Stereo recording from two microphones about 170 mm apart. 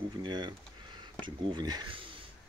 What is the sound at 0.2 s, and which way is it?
Speech, 25° right (ahead or behind).